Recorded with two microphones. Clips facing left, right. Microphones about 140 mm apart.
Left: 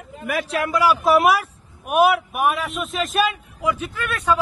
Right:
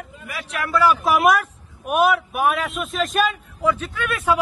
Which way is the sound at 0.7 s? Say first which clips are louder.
Even; 10° left (ahead or behind).